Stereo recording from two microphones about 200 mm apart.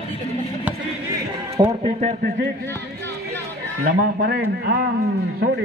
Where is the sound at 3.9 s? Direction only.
50° right (ahead or behind).